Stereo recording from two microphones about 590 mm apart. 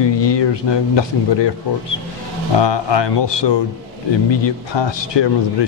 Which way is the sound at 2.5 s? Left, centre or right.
Left.